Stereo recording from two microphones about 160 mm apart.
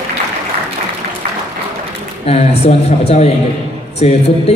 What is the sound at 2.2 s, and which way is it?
A man's voice, 40° left (ahead or behind).